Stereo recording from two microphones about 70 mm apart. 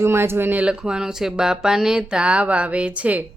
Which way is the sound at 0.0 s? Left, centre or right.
Right.